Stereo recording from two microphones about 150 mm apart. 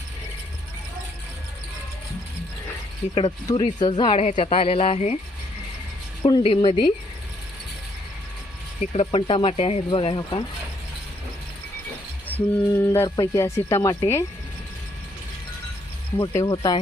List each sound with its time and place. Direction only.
3.2 s speech: 35° left (ahead or behind)
6.2 s speech: 35° left (ahead or behind)
8.8 s speech: 45° left (ahead or behind)
12.3 s mantra: 15° right (ahead or behind)
12.7 s speech: 15° left (ahead or behind)
16.2 s speech: 25° left (ahead or behind)